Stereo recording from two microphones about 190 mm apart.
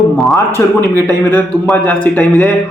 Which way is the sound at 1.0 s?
10° left (ahead or behind).